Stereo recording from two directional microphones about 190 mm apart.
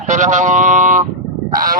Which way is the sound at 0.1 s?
40° right (ahead or behind).